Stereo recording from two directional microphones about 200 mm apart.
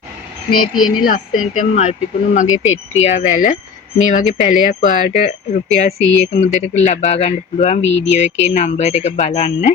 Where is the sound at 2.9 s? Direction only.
35° left (ahead or behind).